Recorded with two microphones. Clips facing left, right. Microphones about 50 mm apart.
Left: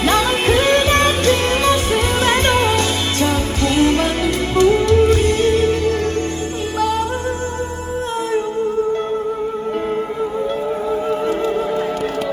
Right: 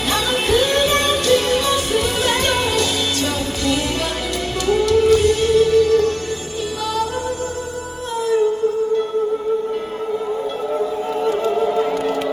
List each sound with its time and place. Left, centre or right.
0.0 s music: left